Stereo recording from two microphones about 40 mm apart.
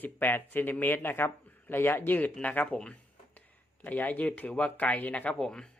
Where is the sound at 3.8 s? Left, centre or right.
Left.